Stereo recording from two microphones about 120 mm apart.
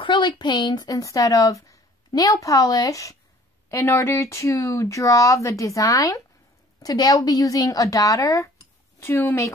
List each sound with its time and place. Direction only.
0.0 s speech: 40° left (ahead or behind); by 9.5 s 20° left (ahead or behind)